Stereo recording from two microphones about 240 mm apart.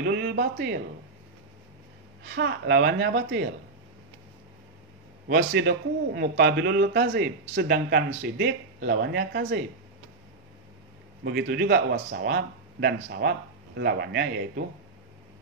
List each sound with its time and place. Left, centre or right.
0.0 s a man's voice: right
2.2 s speech: right
5.3 s speech: right
11.5 s speech: right